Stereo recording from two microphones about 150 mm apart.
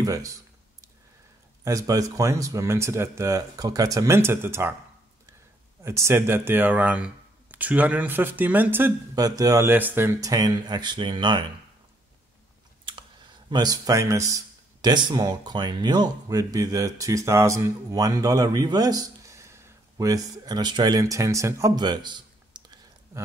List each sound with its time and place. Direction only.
0.0 s a sound: 20° right (ahead or behind)
1.6 s speech: 20° right (ahead or behind)
5.9 s speech: 20° right (ahead or behind)
9.1 s speech: 25° right (ahead or behind)
13.5 s speech: 25° right (ahead or behind)